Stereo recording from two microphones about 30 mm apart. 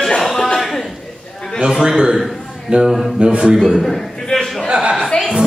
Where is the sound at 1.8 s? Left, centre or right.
Right.